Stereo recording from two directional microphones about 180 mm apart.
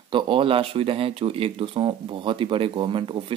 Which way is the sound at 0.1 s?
30° right (ahead or behind).